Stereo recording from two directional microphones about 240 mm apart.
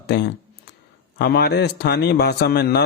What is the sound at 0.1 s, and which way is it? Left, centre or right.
A man's voice, left.